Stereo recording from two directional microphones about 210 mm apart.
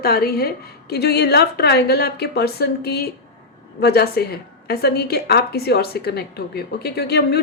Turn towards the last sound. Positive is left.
turn(degrees=50)  # may be behind; listen again after turning